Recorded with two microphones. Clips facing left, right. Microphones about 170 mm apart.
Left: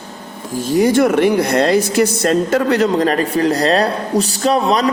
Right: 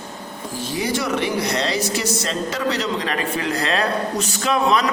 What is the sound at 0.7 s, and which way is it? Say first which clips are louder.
Speech: left 11 dB; 50° left (ahead or behind).